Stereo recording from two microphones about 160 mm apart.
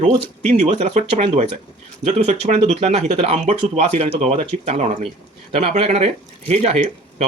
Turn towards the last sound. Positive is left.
turn(degrees=-40)  # may be behind; listen again after turning